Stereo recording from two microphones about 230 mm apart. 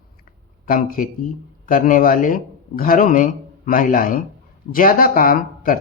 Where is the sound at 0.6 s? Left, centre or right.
Left.